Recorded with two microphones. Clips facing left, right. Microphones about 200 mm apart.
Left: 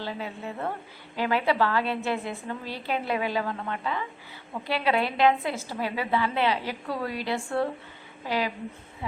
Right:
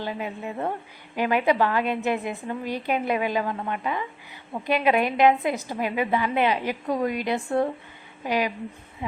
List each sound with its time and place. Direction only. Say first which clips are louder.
0.0 s a woman's voice: right 3 dB; 15° right (ahead or behind)